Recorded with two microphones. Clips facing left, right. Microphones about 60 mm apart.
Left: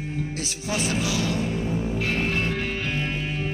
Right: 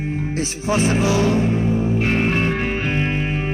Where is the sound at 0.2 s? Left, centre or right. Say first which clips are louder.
Right 7 dB; right.